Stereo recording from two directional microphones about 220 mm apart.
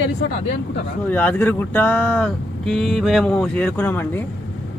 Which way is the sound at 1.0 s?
5° left (ahead or behind).